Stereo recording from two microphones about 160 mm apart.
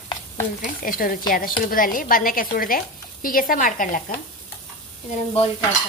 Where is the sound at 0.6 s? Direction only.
60° left (ahead or behind).